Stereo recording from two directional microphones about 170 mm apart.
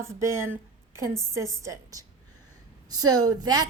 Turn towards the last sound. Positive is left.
turn(degrees=-20)  # may be behind; listen again after turning